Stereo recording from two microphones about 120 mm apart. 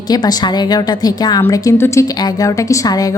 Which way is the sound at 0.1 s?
35° left (ahead or behind).